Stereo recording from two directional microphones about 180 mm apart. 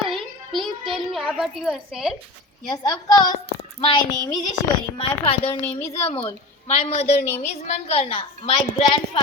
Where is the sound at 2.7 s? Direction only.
25° left (ahead or behind).